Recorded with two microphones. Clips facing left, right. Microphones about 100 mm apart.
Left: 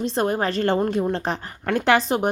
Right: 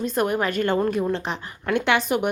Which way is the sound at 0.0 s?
30° left (ahead or behind).